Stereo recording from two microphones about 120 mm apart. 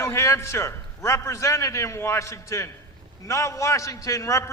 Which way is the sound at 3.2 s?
25° left (ahead or behind).